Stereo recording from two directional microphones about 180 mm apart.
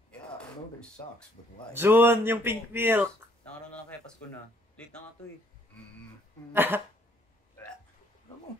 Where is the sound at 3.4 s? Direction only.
10° left (ahead or behind).